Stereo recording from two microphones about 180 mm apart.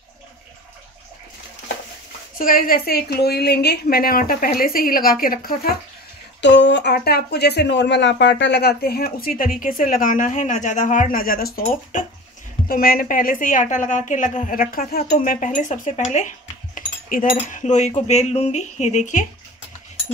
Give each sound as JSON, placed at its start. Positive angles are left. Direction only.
{"t": 2.3, "sound": "a woman's voice", "side_deg": 50}
{"t": 6.4, "sound": "a woman's voice", "side_deg": 85}
{"t": 15.1, "sound": "speech", "side_deg": 45}